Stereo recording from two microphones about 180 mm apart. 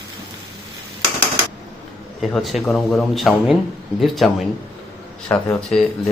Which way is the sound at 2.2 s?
Centre (ahead or behind).